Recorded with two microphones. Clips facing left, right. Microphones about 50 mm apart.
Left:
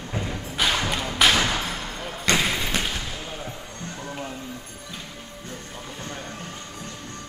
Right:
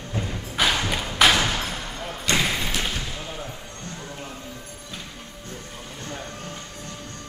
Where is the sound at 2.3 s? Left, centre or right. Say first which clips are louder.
Even; centre.